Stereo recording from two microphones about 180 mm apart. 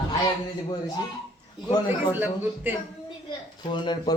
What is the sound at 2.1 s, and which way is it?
Speech, 10° right (ahead or behind).